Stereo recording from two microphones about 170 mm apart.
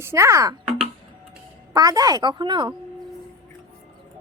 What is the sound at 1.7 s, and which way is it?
Speech, 20° right (ahead or behind).